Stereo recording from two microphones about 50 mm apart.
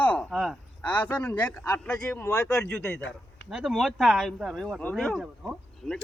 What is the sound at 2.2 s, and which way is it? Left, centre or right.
Speech, left.